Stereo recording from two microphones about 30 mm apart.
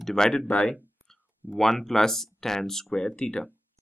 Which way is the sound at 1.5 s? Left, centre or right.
Centre.